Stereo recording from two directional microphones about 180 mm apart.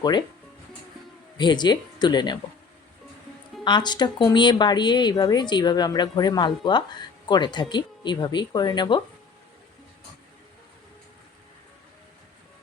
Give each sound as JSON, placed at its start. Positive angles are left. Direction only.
{"t": 0.0, "sound": "a woman's voice", "side_deg": 25}
{"t": 1.4, "sound": "a woman's voice", "side_deg": 25}
{"t": 3.6, "sound": "a woman's voice", "side_deg": 25}